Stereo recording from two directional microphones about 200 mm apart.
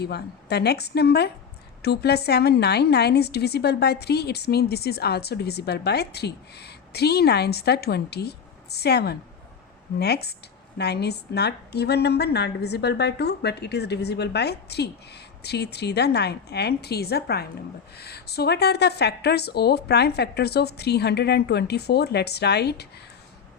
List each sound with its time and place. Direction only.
0.0 s a woman's voice: 55° left (ahead or behind)